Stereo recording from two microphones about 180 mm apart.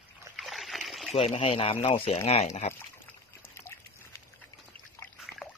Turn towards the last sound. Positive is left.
turn(degrees=0)  # may be behind; listen again after turning